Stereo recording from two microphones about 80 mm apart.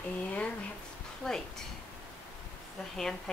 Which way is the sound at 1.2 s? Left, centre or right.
Centre.